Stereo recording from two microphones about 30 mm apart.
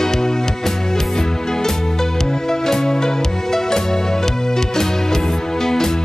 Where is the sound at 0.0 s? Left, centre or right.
Centre.